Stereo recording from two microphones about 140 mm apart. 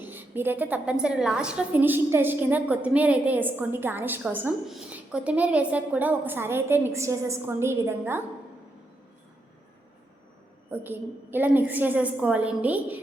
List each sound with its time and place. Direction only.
0.0 s a woman's voice: 15° right (ahead or behind)
10.7 s a woman's voice: 15° right (ahead or behind)